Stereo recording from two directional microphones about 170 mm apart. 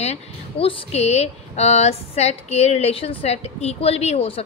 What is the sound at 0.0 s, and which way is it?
A woman's voice, 35° left (ahead or behind).